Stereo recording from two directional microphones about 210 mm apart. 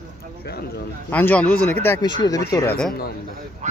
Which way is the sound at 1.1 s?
5° left (ahead or behind).